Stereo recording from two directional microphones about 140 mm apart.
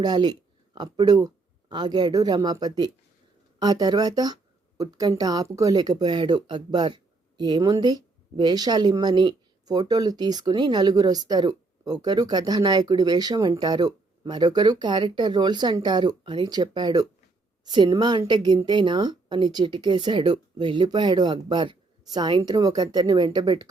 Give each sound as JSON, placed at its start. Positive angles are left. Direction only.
{"t": 0.0, "sound": "a woman's voice", "side_deg": -30}